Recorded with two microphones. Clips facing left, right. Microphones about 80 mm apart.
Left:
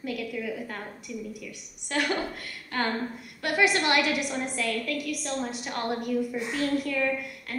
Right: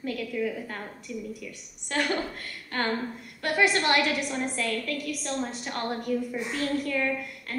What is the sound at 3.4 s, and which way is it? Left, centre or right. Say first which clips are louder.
A woman's voice: even; right.